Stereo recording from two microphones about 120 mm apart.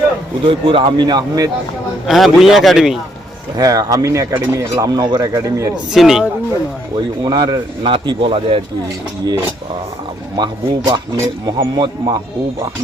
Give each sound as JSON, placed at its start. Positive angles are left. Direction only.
{"t": 0.4, "sound": "a man's voice", "side_deg": -45}
{"t": 2.0, "sound": "a man's voice", "side_deg": 0}
{"t": 3.6, "sound": "speech", "side_deg": -30}
{"t": 5.9, "sound": "a man's voice", "side_deg": -5}
{"t": 7.3, "sound": "a man's voice", "side_deg": -35}
{"t": 10.3, "sound": "a man's voice", "side_deg": -35}